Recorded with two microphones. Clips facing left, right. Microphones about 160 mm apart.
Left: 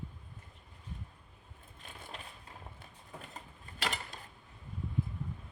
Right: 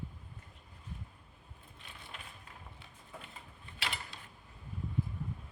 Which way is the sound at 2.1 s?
35° left (ahead or behind).